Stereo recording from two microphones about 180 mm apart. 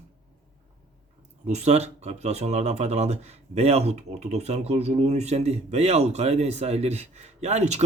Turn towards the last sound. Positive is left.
turn(degrees=-40)  # may be behind; listen again after turning